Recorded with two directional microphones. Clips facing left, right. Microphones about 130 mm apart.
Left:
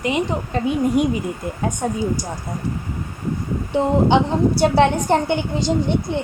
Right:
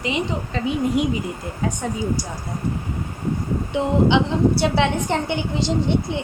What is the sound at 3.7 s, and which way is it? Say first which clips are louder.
A woman's voice: left 2 dB; 40° left (ahead or behind).